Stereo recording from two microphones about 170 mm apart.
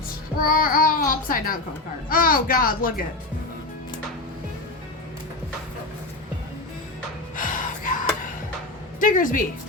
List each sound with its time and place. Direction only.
0.4 s speech: 55° left (ahead or behind)
7.3 s music: 50° left (ahead or behind)
9.0 s a woman's voice: 50° left (ahead or behind)